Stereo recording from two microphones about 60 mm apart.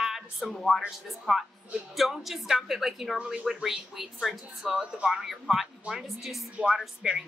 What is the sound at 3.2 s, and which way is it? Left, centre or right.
Speech, centre.